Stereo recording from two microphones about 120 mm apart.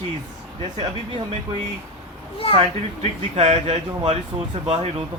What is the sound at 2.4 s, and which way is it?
Speech, 55° left (ahead or behind).